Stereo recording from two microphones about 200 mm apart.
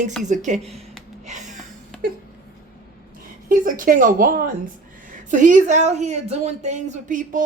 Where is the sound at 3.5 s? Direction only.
45° right (ahead or behind).